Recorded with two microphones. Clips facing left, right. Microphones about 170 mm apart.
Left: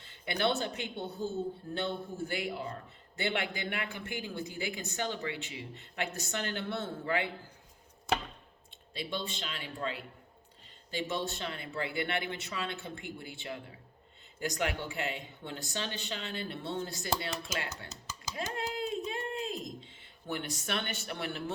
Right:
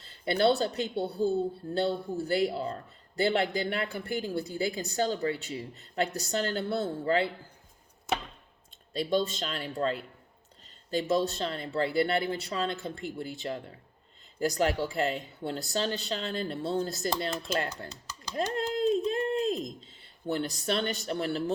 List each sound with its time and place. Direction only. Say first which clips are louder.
0.0 s a woman's voice: right 7 dB; 35° right (ahead or behind)
8.9 s speech: right 10 dB; 40° right (ahead or behind)
11.1 s a woman's voice: right 10 dB; 40° right (ahead or behind)
18.3 s a sound: right 7 dB; 40° right (ahead or behind)
20.3 s a woman's voice: right 6 dB; 35° right (ahead or behind)